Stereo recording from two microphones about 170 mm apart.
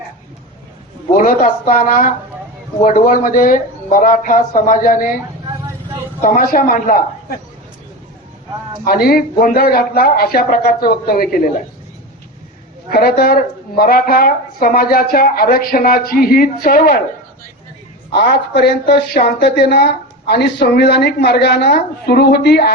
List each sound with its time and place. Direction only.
1.1 s speech: 50° left (ahead or behind)
6.2 s a woman's voice: 55° left (ahead or behind)
8.8 s a woman's voice: 60° left (ahead or behind)
12.9 s a woman's voice: 60° left (ahead or behind)
18.1 s speech: 75° left (ahead or behind)